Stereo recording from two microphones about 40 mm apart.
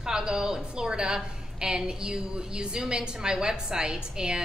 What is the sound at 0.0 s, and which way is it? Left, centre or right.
A woman's voice, centre.